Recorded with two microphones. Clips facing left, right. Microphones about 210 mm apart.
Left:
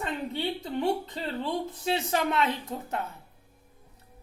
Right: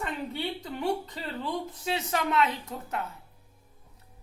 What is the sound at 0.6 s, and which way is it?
A woman's voice, 25° left (ahead or behind).